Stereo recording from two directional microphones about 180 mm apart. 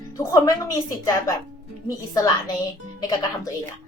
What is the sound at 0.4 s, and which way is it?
Speech, 20° left (ahead or behind).